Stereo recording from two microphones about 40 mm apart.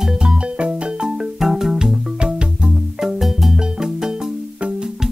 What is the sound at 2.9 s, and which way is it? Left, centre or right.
Marimba, centre.